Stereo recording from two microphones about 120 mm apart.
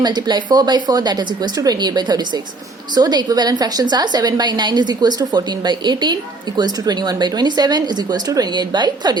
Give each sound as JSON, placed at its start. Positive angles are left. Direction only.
{"t": 0.0, "sound": "a woman's voice", "side_deg": -35}